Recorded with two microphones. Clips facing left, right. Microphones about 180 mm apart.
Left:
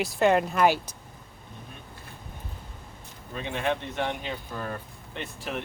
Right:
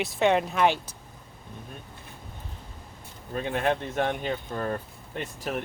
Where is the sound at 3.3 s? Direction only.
45° right (ahead or behind).